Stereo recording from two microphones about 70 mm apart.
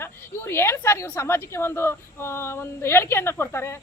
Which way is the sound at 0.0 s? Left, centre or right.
Left.